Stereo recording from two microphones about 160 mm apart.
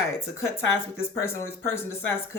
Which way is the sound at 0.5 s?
15° left (ahead or behind).